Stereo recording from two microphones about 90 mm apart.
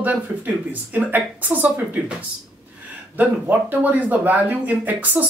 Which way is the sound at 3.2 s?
20° right (ahead or behind).